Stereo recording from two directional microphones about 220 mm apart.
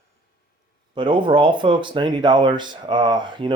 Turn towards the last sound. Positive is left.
turn(degrees=-20)  # may be behind; listen again after turning